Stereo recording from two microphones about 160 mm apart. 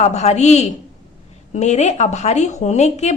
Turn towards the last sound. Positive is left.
turn(degrees=45)  # may be behind; listen again after turning